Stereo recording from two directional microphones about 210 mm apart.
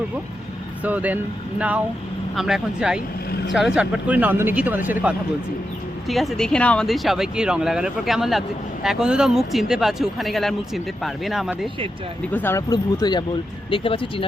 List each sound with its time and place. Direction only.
0.8 s speech: 5° right (ahead or behind)
12.3 s speech: 10° left (ahead or behind)